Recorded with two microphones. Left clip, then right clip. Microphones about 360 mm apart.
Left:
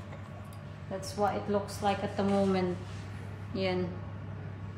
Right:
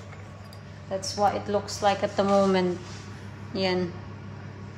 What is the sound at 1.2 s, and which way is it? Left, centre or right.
A woman's voice, right.